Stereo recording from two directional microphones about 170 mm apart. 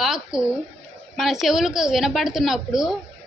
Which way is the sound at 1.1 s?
Centre (ahead or behind).